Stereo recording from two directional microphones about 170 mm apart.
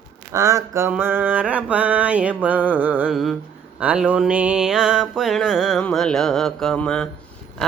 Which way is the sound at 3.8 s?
10° right (ahead or behind).